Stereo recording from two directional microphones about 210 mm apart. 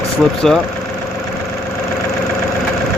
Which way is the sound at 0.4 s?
Centre (ahead or behind).